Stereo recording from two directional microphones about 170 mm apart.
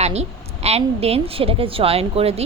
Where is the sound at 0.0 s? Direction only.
40° right (ahead or behind).